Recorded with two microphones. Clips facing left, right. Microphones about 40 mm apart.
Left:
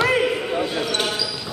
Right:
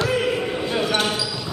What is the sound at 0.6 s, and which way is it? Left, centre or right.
Basketball bounce, centre.